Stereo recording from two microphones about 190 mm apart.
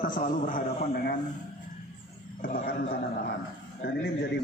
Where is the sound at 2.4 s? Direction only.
45° left (ahead or behind).